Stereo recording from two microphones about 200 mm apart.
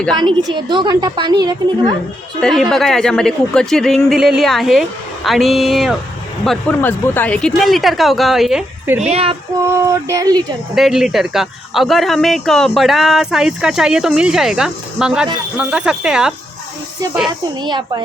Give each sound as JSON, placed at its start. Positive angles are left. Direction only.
{"t": 0.2, "sound": "a woman's voice", "side_deg": -25}
{"t": 2.4, "sound": "a man's voice", "side_deg": 0}
{"t": 9.0, "sound": "speech", "side_deg": -30}
{"t": 9.8, "sound": "a sound", "side_deg": -15}
{"t": 10.8, "sound": "a man's voice", "side_deg": 0}
{"t": 17.6, "sound": "a woman's voice", "side_deg": -20}